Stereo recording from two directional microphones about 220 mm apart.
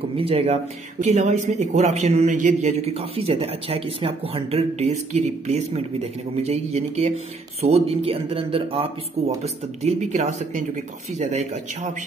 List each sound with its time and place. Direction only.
0.2 s a man's voice: 25° right (ahead or behind)